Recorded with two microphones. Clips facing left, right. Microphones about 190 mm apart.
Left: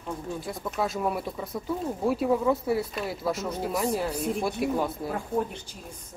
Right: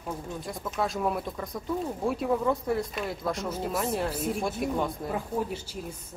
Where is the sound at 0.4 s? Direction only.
Centre (ahead or behind).